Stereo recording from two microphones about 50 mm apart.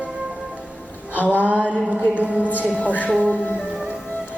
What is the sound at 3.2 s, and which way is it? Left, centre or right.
Music, left.